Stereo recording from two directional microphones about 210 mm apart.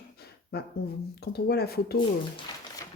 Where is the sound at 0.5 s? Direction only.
50° left (ahead or behind).